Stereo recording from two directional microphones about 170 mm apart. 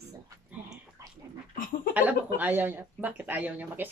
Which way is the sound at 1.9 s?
10° right (ahead or behind).